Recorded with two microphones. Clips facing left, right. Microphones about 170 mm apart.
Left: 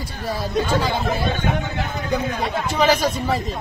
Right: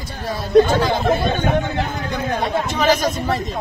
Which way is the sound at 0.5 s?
60° right (ahead or behind).